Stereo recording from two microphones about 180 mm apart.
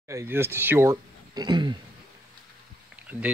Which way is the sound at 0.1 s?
15° right (ahead or behind).